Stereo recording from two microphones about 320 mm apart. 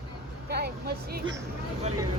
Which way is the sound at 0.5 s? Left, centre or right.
Right.